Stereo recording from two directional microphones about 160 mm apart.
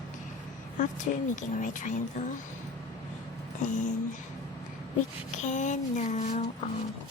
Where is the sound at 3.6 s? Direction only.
50° left (ahead or behind).